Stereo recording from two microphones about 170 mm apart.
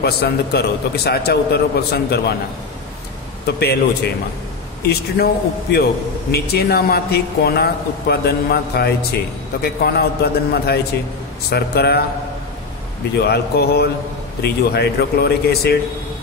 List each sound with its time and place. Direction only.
0.0 s speech: 70° left (ahead or behind)
3.4 s speech: 70° left (ahead or behind)
4.8 s speech: 70° left (ahead or behind)
13.2 s speech: 70° left (ahead or behind)